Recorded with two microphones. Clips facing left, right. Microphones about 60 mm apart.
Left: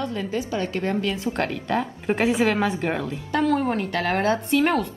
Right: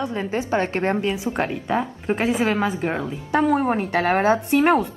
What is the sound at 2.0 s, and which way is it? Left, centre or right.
Speech, centre.